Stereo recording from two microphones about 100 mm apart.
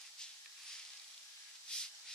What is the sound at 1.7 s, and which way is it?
Steam, 10° left (ahead or behind).